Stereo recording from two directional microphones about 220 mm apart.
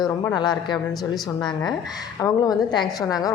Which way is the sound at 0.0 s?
20° left (ahead or behind).